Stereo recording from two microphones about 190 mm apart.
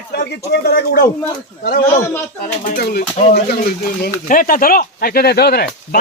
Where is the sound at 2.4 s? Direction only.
50° left (ahead or behind).